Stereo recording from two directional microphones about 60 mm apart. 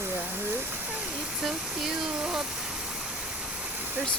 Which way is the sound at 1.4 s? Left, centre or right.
Centre.